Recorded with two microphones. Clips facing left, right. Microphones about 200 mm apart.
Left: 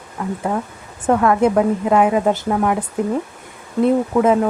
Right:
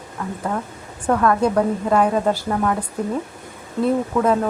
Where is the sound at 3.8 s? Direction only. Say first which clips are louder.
Left 4 dB; 20° left (ahead or behind).